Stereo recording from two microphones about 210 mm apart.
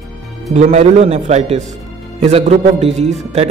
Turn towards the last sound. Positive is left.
turn(degrees=-30)  # may be behind; listen again after turning